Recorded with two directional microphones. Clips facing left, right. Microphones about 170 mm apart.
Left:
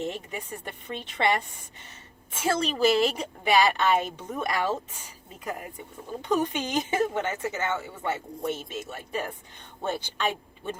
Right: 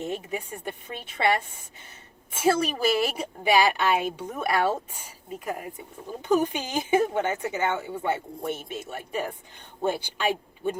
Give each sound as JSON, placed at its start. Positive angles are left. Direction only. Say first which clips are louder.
{"t": 0.0, "sound": "a woman's voice", "louder": "right 2 dB", "side_deg": -10}
{"t": 2.3, "sound": "a woman's voice", "louder": "right 3 dB", "side_deg": -10}
{"t": 6.2, "sound": "a woman's voice", "louder": "right 3 dB", "side_deg": -10}